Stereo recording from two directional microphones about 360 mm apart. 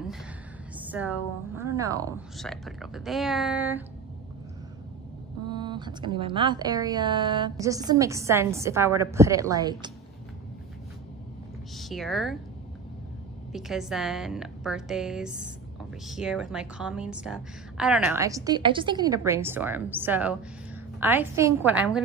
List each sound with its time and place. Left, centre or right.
0.7 s a woman's voice: centre
5.5 s speech: centre
11.7 s speech: centre
13.5 s a woman's voice: centre